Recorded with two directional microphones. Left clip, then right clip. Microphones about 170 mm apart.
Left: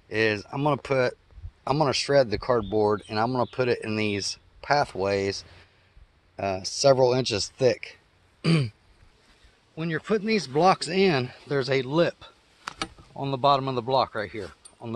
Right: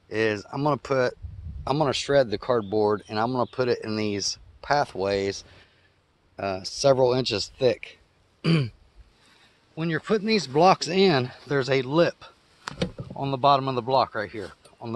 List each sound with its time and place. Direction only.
0.1 s speech: 5° left (ahead or behind)
9.8 s speech: 55° right (ahead or behind); by 15.0 s 25° right (ahead or behind)